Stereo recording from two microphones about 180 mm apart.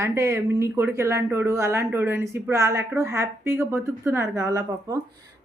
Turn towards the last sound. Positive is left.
turn(degrees=-15)  # may be behind; listen again after turning